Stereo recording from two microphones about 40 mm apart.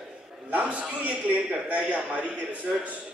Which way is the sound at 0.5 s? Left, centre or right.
Right.